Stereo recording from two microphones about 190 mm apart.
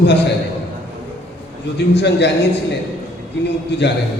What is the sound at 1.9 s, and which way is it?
Speech, 65° left (ahead or behind).